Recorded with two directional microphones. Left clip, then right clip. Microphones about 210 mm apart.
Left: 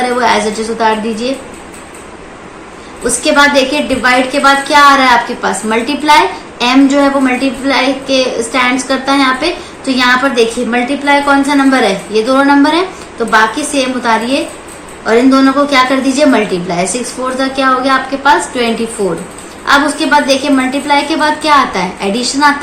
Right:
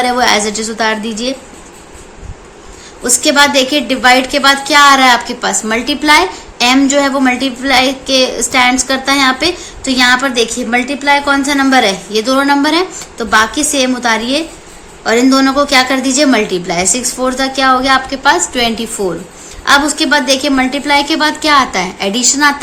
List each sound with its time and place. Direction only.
0.0 s a woman's voice: 50° right (ahead or behind)
3.0 s a woman's voice: 50° right (ahead or behind)